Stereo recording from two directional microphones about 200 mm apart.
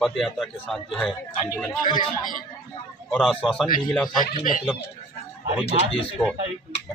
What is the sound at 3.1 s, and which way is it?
Speech, 5° left (ahead or behind).